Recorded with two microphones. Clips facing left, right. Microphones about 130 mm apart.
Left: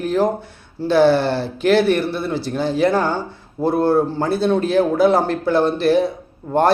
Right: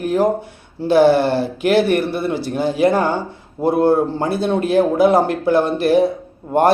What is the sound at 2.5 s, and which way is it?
Speech, 10° right (ahead or behind).